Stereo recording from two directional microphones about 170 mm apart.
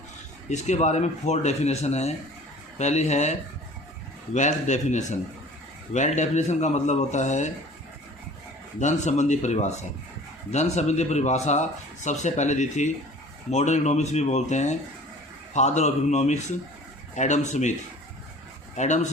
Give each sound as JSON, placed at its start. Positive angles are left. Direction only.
{"t": 0.5, "sound": "speech", "side_deg": 45}
{"t": 4.4, "sound": "speech", "side_deg": 45}
{"t": 8.8, "sound": "speech", "side_deg": 45}
{"t": 18.8, "sound": "speech", "side_deg": 45}